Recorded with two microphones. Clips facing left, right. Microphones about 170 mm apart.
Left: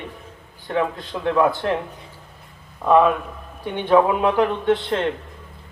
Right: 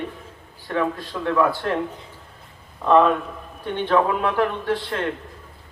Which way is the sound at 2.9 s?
5° left (ahead or behind).